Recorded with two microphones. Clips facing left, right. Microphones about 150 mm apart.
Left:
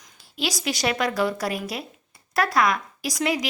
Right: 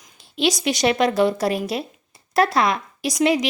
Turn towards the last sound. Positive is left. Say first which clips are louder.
# right 6 dB
turn(degrees=-25)  # may be behind; listen again after turning